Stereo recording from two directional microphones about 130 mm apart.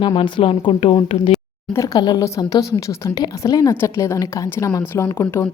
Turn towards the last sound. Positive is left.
turn(degrees=20)  # may be behind; listen again after turning